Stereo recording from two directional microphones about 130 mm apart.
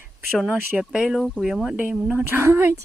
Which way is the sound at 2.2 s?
20° right (ahead or behind).